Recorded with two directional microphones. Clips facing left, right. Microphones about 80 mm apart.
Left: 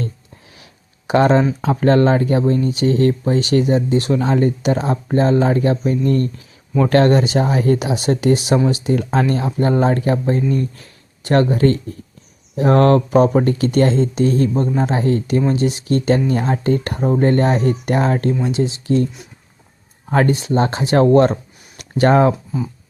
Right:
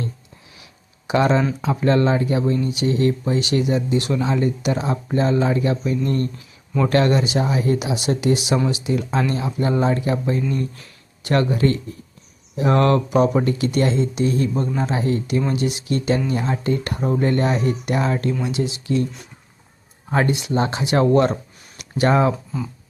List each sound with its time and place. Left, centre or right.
0.6 s a sound: left
1.7 s speech: left
10.5 s speech: left
15.4 s speech: left
20.1 s speech: left